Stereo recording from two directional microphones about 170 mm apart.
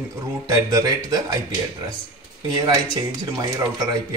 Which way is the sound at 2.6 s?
20° right (ahead or behind).